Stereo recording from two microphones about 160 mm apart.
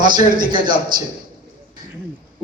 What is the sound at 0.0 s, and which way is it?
Speech, 60° right (ahead or behind).